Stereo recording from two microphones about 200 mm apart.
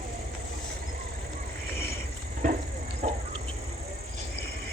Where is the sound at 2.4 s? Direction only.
40° right (ahead or behind).